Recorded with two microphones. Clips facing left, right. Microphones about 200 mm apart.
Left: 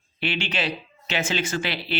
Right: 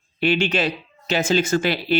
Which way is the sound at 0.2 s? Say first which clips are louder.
Right 8 dB; 45° right (ahead or behind).